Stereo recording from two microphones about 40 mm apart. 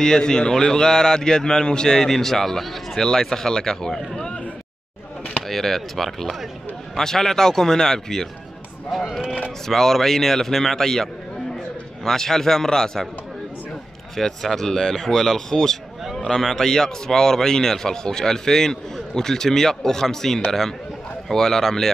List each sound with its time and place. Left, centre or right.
0.0 s a man's voice: centre
5.5 s a man's voice: centre
9.7 s a man's voice: centre
14.1 s a man's voice: centre